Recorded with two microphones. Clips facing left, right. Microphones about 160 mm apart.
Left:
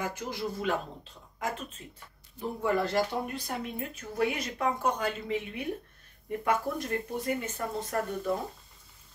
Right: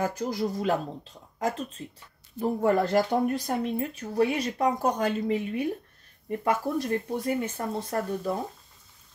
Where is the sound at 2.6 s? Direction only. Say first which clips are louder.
Right 4 dB; 45° right (ahead or behind).